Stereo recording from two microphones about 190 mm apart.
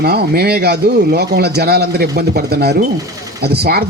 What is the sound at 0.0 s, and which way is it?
Speech, 55° right (ahead or behind).